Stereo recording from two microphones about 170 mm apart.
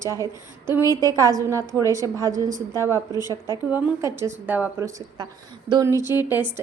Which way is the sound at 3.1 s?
20° left (ahead or behind).